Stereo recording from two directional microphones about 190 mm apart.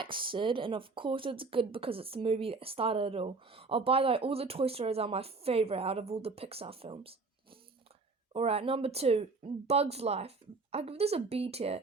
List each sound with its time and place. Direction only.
0.0 s speech: 25° right (ahead or behind)